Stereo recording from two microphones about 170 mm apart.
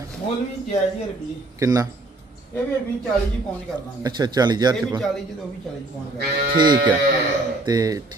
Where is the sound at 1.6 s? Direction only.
20° right (ahead or behind).